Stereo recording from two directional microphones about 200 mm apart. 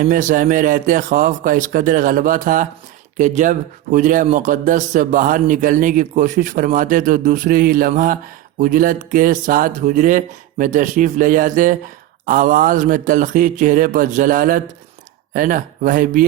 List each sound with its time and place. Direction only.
0.0 s speech: 40° right (ahead or behind)